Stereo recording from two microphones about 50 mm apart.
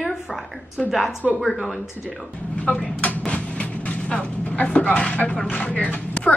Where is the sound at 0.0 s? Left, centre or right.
Centre.